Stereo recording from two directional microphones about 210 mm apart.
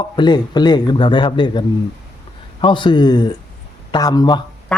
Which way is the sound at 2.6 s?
20° left (ahead or behind).